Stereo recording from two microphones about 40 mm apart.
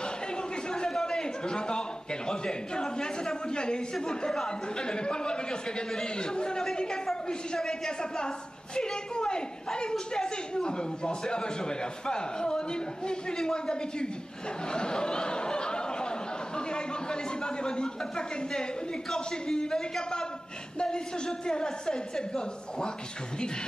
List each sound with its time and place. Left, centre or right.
0.7 s a man's voice: centre
14.7 s a sound: left
20.8 s a woman's voice: centre